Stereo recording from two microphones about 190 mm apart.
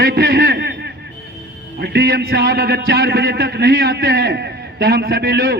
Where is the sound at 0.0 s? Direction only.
50° right (ahead or behind).